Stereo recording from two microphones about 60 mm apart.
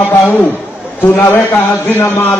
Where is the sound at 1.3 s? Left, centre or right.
Left.